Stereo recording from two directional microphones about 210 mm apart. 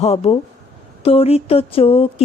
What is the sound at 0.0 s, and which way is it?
Mantra, 30° left (ahead or behind).